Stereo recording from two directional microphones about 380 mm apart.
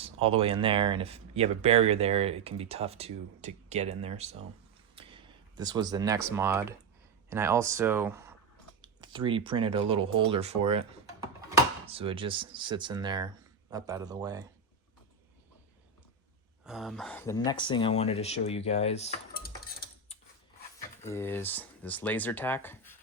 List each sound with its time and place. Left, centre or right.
0.0 s speech: centre
16.6 s speech: centre; by 19.6 s left
21.1 s speech: centre